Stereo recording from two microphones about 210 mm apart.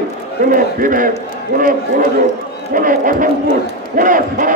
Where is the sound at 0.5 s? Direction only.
40° right (ahead or behind).